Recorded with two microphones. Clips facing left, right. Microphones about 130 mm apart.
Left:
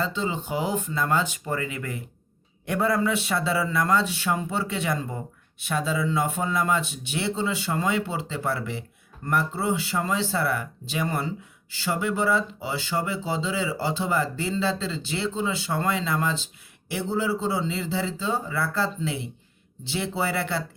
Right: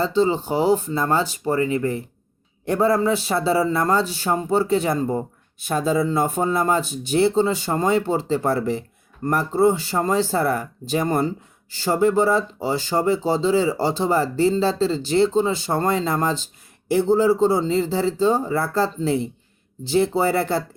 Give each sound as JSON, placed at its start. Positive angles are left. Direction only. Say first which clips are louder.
{"t": 0.0, "sound": "speech", "louder": "right 9 dB", "side_deg": -35}